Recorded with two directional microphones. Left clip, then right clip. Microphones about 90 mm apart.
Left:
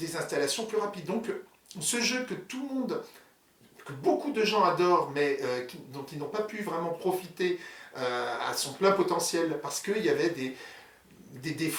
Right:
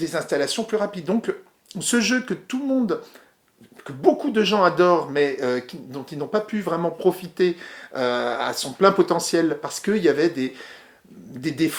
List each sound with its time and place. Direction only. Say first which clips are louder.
0.0 s speech: right 7 dB; 40° right (ahead or behind)
4.0 s speech: right 8 dB; 35° right (ahead or behind)